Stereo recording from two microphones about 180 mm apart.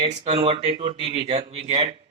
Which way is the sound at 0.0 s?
25° right (ahead or behind).